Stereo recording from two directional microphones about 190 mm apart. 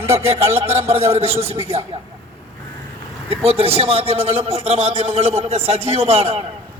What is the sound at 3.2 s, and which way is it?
A man's voice, 30° right (ahead or behind).